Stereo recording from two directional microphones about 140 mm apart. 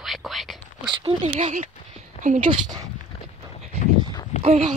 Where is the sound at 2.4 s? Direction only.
40° right (ahead or behind).